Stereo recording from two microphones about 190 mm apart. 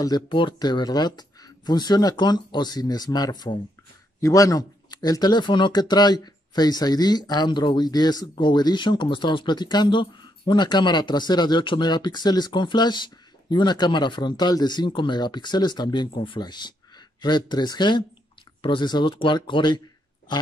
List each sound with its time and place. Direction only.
0.0 s speech: 25° left (ahead or behind)